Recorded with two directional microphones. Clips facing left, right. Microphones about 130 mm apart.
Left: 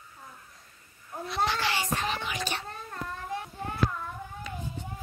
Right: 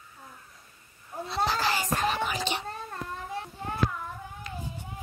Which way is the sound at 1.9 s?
45° right (ahead or behind).